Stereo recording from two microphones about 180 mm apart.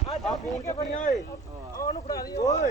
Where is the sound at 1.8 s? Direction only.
20° left (ahead or behind).